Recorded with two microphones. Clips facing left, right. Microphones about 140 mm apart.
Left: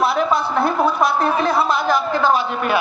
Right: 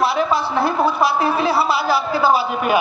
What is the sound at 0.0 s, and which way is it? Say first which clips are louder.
A woman's voice: even; centre (ahead or behind).